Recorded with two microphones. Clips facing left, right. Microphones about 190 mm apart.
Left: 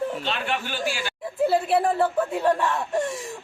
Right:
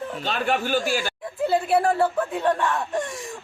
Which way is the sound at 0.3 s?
45° right (ahead or behind).